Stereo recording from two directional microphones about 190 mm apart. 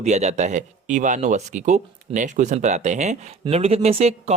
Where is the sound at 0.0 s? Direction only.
35° right (ahead or behind).